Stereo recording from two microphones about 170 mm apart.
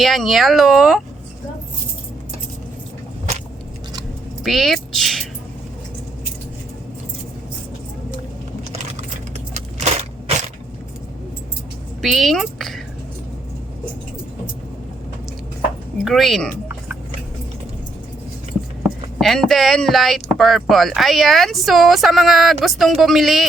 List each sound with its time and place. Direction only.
0.0 s speech: centre (ahead or behind)
4.4 s speech: centre (ahead or behind)
8.7 s a sound: 40° right (ahead or behind)
9.6 s crushing: 40° right (ahead or behind)
12.0 s speech: centre (ahead or behind)
16.0 s speech: centre (ahead or behind)
18.8 s speech: centre (ahead or behind)